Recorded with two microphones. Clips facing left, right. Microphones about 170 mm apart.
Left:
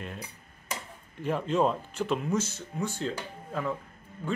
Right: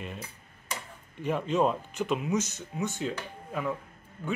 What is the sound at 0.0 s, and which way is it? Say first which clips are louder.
Speech: even; 5° right (ahead or behind).